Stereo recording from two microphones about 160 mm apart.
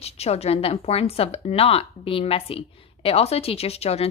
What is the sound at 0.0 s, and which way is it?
A woman's voice, 40° left (ahead or behind).